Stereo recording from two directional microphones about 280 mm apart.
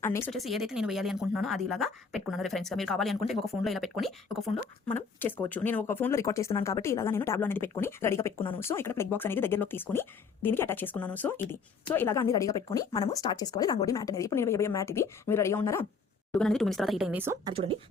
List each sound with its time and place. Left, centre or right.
0.0 s speech: centre
17.5 s a woman's voice: centre